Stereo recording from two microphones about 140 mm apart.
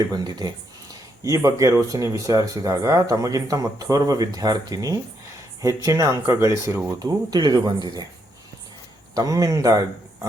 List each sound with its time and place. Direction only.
0.1 s speech: 30° right (ahead or behind)
7.0 s speech: 30° right (ahead or behind)
9.1 s speech: 25° right (ahead or behind)